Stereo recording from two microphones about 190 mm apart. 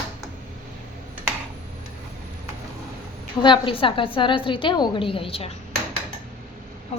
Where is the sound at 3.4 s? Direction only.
25° left (ahead or behind).